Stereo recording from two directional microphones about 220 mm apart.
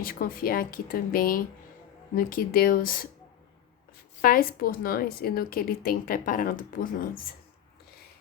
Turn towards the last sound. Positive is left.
turn(degrees=40)  # may be behind; listen again after turning